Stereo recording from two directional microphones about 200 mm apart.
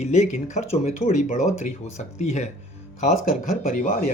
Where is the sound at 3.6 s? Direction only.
40° left (ahead or behind).